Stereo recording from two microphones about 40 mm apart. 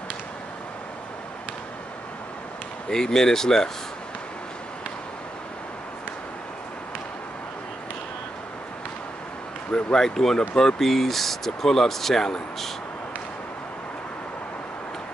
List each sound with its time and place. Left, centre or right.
2.9 s speech: centre
9.7 s speech: left
9.9 s speech: centre